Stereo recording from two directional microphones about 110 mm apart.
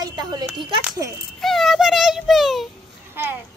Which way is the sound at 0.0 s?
40° right (ahead or behind).